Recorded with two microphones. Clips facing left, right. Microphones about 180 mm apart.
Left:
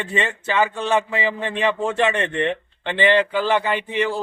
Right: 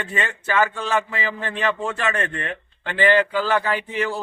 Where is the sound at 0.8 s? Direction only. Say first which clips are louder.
Left 3 dB; 25° left (ahead or behind).